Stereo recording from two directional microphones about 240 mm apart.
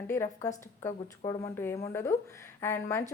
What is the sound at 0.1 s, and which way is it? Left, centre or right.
A woman's voice, centre.